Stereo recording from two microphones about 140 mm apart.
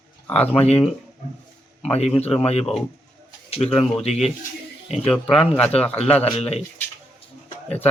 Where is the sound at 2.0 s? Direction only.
45° left (ahead or behind).